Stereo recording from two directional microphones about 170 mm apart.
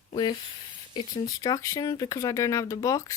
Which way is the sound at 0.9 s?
30° left (ahead or behind).